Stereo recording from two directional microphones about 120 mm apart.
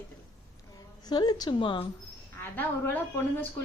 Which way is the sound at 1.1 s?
35° left (ahead or behind).